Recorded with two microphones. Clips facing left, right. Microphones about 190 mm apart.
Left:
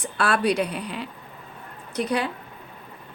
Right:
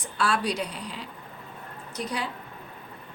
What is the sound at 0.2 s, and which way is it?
A woman's voice, 60° left (ahead or behind).